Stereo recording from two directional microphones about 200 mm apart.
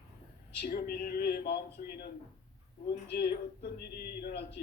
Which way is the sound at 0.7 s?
45° left (ahead or behind).